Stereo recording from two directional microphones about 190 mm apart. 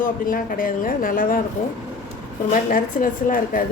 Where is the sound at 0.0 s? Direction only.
45° left (ahead or behind).